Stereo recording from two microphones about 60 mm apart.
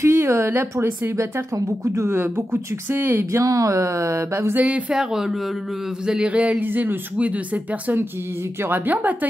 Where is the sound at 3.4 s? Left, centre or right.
Right.